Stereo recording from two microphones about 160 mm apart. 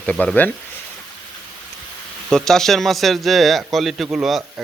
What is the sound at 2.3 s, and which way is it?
A man's voice, 5° left (ahead or behind).